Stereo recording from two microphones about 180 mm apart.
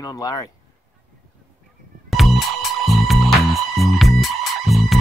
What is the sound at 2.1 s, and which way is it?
Music, centre (ahead or behind).